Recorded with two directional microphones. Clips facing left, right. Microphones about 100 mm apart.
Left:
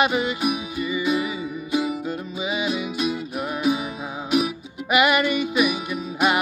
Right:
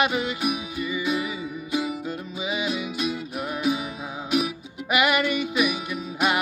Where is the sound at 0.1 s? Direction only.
25° left (ahead or behind).